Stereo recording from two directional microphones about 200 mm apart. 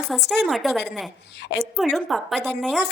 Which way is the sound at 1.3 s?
60° left (ahead or behind).